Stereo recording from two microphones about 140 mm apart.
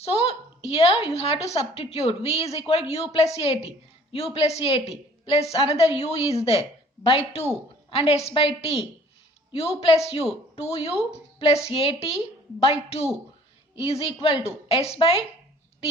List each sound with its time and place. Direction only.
0.0 s a woman's voice: 45° left (ahead or behind)